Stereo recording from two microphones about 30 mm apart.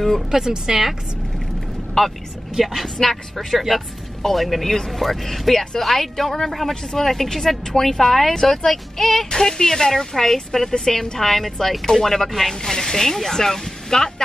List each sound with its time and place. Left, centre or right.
0.3 s a woman's voice: centre
2.0 s speech: centre
2.6 s a woman's voice: centre